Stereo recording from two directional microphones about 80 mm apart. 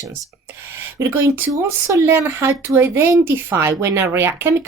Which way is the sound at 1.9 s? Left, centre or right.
Right.